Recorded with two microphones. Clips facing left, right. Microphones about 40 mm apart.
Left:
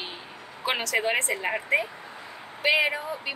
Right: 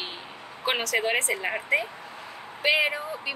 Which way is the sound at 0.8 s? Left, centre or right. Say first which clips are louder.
Left 1 dB; centre.